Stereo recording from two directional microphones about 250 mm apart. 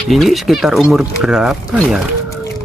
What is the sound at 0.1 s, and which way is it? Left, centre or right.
Speech, centre.